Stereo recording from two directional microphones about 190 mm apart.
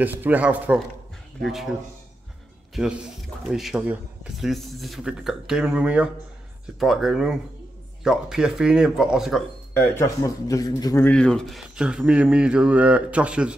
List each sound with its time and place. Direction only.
0.0 s speech: 10° right (ahead or behind)
9.8 s speech: 15° left (ahead or behind)
11.1 s speech: 5° left (ahead or behind)